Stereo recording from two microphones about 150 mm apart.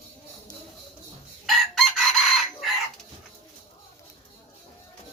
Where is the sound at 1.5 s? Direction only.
Centre (ahead or behind).